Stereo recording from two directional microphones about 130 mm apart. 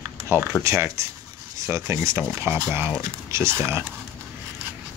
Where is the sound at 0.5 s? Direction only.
15° right (ahead or behind).